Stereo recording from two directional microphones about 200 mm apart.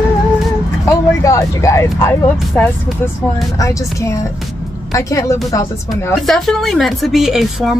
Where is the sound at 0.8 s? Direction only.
15° left (ahead or behind).